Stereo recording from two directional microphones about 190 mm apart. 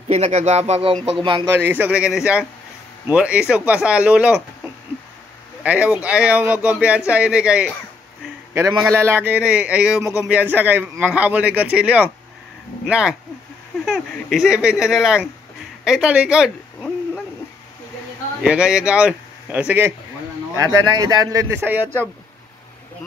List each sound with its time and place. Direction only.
0.1 s speech: 35° right (ahead or behind)
1.5 s speech: 10° right (ahead or behind)
5.6 s speech: 10° right (ahead or behind)
8.8 s speech: 10° right (ahead or behind)
15.8 s a sound: 5° right (ahead or behind)
18.4 s speech: 5° right (ahead or behind)